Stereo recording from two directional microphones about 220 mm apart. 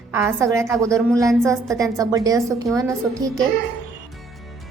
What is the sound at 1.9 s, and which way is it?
A woman's voice, 15° right (ahead or behind).